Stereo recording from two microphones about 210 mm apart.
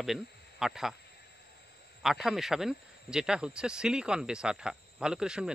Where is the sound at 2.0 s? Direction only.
Centre (ahead or behind).